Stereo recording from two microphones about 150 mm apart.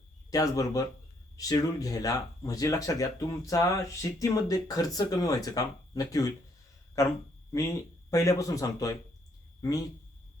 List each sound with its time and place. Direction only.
0.3 s speech: 25° left (ahead or behind)